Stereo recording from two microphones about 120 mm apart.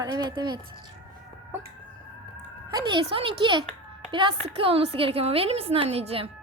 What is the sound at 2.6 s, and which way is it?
A woman's voice, 35° right (ahead or behind).